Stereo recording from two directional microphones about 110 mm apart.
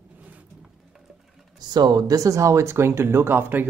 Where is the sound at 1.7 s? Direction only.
40° right (ahead or behind).